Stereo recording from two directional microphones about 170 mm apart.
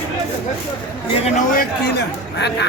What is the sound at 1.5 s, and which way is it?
Speech, 65° left (ahead or behind).